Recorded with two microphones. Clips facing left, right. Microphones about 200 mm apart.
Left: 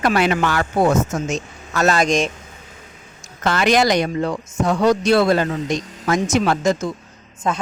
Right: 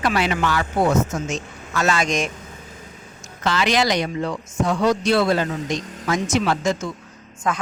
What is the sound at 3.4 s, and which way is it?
Speech, 50° left (ahead or behind).